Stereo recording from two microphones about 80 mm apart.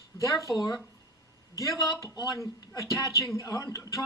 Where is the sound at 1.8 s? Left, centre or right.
Left.